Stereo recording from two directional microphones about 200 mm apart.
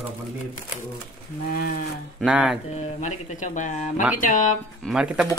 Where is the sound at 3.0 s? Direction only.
35° left (ahead or behind).